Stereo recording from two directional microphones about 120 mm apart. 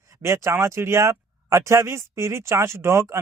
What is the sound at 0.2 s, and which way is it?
Speech, 25° right (ahead or behind).